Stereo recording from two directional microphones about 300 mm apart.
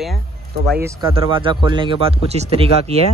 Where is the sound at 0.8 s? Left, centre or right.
Centre.